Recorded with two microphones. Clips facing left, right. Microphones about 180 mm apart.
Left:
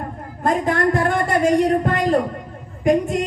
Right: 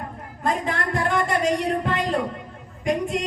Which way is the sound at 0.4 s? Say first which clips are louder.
Left 7 dB; 50° left (ahead or behind).